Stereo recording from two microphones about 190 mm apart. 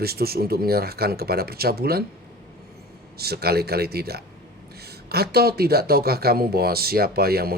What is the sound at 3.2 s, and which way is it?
Speech, 55° right (ahead or behind).